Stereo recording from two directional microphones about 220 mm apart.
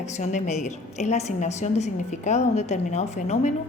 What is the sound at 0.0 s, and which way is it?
A woman's voice, 30° left (ahead or behind).